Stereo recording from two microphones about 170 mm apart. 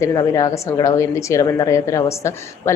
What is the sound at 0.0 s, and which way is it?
A woman's voice, 20° left (ahead or behind).